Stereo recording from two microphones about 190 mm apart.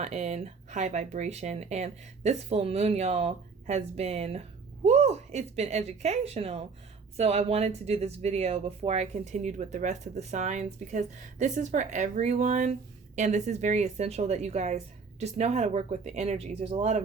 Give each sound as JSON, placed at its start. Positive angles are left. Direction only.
{"t": 0.0, "sound": "speech", "side_deg": -35}